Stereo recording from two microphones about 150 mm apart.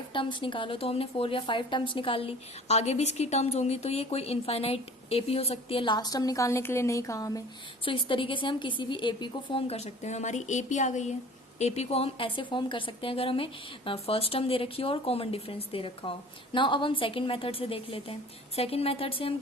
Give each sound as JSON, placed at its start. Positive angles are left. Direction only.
{"t": 0.1, "sound": "a woman's voice", "side_deg": 35}
{"t": 7.9, "sound": "a woman's voice", "side_deg": 35}